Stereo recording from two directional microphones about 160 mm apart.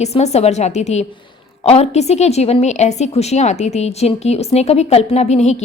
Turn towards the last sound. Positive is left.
turn(degrees=45)  # may be behind; listen again after turning